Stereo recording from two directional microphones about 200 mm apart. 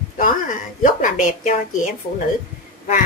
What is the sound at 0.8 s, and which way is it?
Speech, 40° left (ahead or behind).